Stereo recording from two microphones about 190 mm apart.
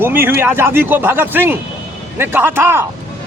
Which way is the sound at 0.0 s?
10° right (ahead or behind).